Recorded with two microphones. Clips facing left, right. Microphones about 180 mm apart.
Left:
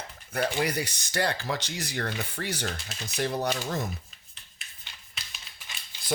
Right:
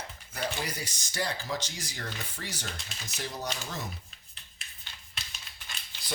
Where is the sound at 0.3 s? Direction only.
65° left (ahead or behind).